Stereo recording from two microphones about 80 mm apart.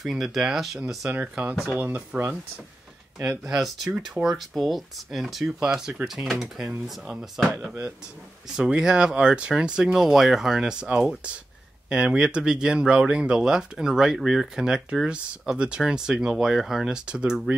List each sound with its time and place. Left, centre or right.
0.0 s speech: centre
1.8 s speech: right
3.3 s speech: centre
8.5 s speech: centre